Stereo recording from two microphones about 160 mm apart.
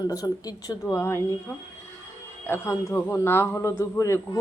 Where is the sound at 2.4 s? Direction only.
15° left (ahead or behind).